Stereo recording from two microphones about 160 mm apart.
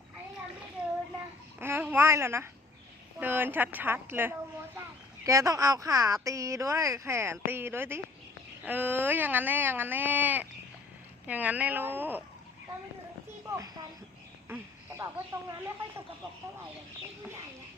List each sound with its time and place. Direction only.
1.5 s babbling: 15° right (ahead or behind)
3.2 s speech: 10° right (ahead or behind)
14.4 s a sound: 15° right (ahead or behind)